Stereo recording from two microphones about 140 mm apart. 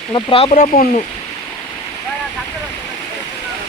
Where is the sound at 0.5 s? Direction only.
90° left.